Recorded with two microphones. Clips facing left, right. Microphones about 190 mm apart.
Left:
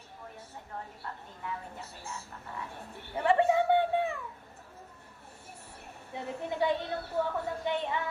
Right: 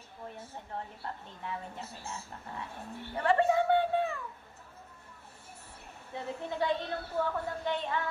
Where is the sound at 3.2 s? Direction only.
15° left (ahead or behind).